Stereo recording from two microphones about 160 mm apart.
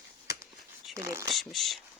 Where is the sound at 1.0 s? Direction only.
20° right (ahead or behind).